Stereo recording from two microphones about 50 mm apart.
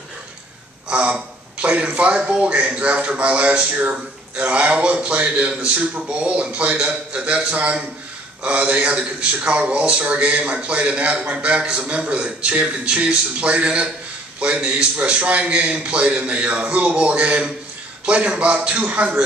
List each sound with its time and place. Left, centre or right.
0.8 s a sound: right
2.0 s a man's voice: right
11.6 s a man's voice: centre
11.9 s a man's voice: right